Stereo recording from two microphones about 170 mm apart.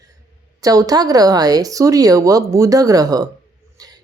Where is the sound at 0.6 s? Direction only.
20° right (ahead or behind).